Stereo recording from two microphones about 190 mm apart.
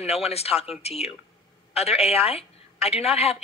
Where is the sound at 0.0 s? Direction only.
30° left (ahead or behind).